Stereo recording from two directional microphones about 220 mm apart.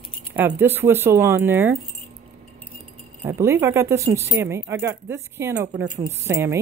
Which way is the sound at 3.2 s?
10° right (ahead or behind).